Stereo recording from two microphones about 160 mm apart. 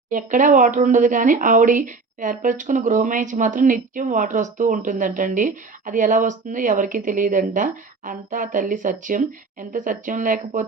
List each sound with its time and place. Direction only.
0.1 s speech: 55° right (ahead or behind)